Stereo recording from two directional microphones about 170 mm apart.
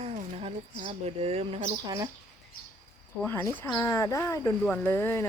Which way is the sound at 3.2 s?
15° left (ahead or behind).